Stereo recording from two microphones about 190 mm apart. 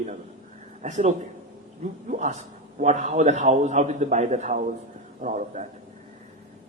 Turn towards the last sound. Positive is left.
turn(degrees=-40)  # may be behind; listen again after turning